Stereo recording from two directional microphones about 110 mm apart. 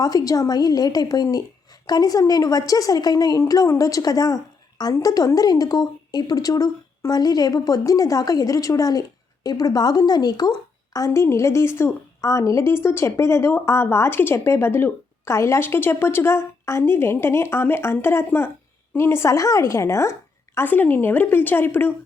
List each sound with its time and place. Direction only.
0.0 s a woman's voice: 35° left (ahead or behind)